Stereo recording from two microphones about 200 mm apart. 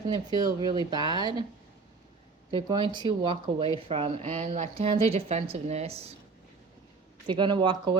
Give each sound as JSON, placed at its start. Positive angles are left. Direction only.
{"t": 0.1, "sound": "speech", "side_deg": -20}
{"t": 2.5, "sound": "a woman's voice", "side_deg": -20}
{"t": 7.3, "sound": "speech", "side_deg": -25}